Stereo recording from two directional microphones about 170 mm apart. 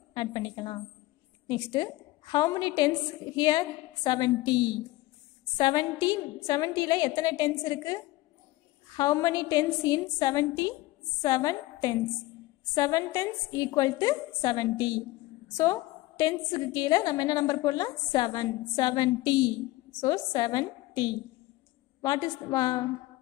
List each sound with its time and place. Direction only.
0.1 s a woman's voice: 25° left (ahead or behind)